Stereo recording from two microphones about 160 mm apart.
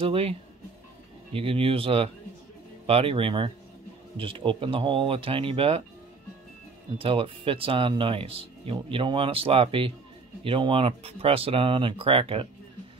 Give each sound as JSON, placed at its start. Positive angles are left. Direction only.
{"t": 0.0, "sound": "speech", "side_deg": -35}
{"t": 7.0, "sound": "speech", "side_deg": -35}